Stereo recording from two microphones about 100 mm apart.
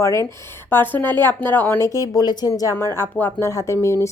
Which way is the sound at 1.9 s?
40° left (ahead or behind).